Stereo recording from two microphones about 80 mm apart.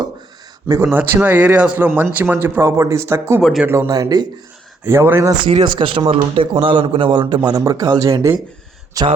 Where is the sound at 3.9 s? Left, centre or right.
Right.